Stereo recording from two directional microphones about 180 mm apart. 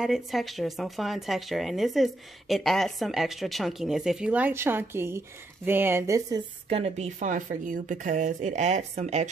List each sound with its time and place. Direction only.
0.0 s a woman's voice: centre (ahead or behind); by 6.4 s 15° right (ahead or behind)
6.7 s speech: 35° right (ahead or behind)